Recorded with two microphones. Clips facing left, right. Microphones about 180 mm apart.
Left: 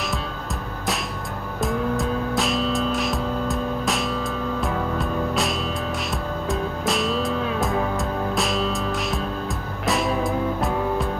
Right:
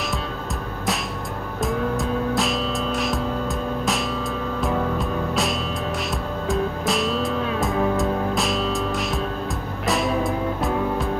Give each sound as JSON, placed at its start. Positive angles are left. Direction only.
{"t": 1.6, "sound": "music", "side_deg": 0}
{"t": 6.5, "sound": "music", "side_deg": 0}